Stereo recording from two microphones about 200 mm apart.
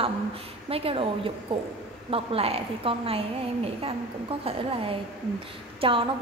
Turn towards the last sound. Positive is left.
turn(degrees=-25)  # may be behind; listen again after turning